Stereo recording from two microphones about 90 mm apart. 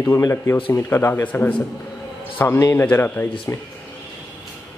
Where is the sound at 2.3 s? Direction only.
35° left (ahead or behind).